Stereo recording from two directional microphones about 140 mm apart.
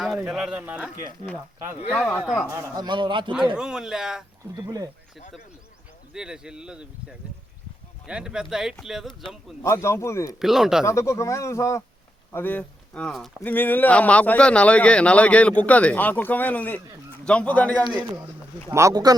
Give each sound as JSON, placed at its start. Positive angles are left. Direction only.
{"t": 0.0, "sound": "speech", "side_deg": -5}
{"t": 1.9, "sound": "speech", "side_deg": 5}
{"t": 2.5, "sound": "a man's voice", "side_deg": -25}
{"t": 3.6, "sound": "speech", "side_deg": -5}
{"t": 4.5, "sound": "speech", "side_deg": -25}
{"t": 6.1, "sound": "speech", "side_deg": -5}
{"t": 9.6, "sound": "speech", "side_deg": 20}
{"t": 10.4, "sound": "speech", "side_deg": 0}
{"t": 10.8, "sound": "speech", "side_deg": 20}
{"t": 18.7, "sound": "speech", "side_deg": -20}